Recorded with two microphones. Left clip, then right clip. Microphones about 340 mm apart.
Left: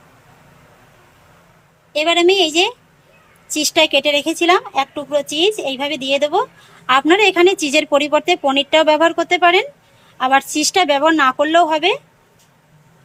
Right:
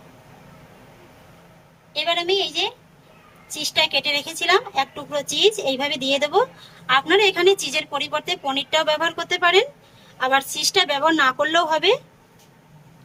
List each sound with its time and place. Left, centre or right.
1.9 s a woman's voice: centre